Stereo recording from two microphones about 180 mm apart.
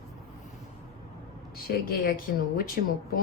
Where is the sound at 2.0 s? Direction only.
55° left (ahead or behind).